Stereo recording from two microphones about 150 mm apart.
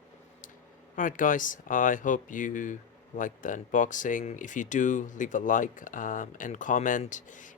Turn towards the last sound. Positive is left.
turn(degrees=55)  # may be behind; listen again after turning